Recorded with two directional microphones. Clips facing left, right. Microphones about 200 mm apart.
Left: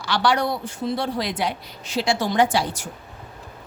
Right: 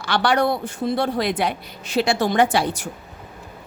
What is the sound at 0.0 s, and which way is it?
Speech, 55° right (ahead or behind).